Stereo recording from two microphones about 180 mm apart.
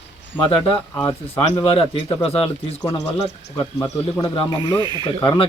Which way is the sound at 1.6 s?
35° left (ahead or behind).